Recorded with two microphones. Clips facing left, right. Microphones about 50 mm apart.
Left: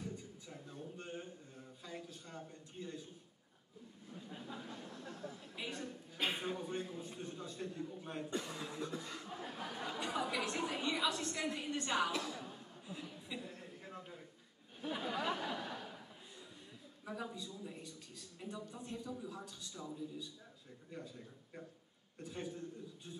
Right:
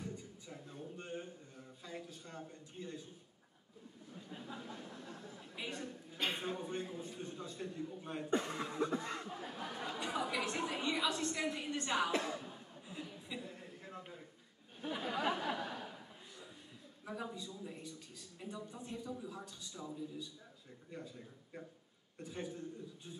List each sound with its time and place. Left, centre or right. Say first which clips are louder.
0.0 s a sound: even; centre
1.9 s a man's voice: right 1 dB; centre
4.1 s a man's voice: even; centre
8.3 s speech: right 9 dB; right
9.3 s chatter: right 1 dB; centre
11.5 s a man's voice: even; centre
12.1 s speech: right 4 dB; right
12.4 s chuckle: left 1 dB; centre
14.8 s a man's voice: right 1 dB; centre
15.2 s a sound: right 2 dB; centre
17.0 s a man's voice: right 1 dB; centre